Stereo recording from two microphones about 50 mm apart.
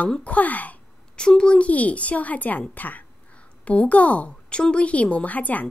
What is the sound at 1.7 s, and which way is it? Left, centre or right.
A woman's voice, left.